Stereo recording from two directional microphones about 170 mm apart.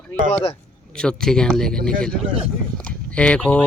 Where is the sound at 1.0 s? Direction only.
5° left (ahead or behind).